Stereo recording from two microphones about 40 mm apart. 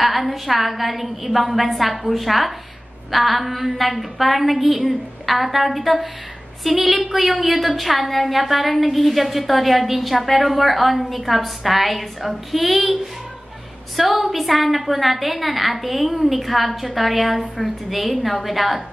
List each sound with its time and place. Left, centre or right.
0.0 s a woman's voice: centre